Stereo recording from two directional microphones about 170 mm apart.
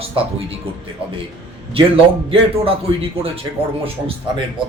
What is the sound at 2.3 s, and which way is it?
Speech, 35° right (ahead or behind).